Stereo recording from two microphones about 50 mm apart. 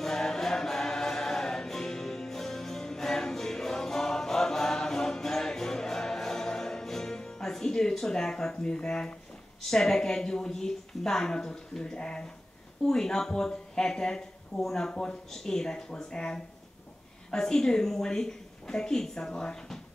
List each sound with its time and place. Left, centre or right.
0.0 s choir: centre
8.7 s speech: centre